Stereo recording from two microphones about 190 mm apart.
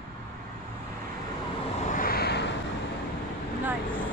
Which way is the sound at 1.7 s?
40° left (ahead or behind).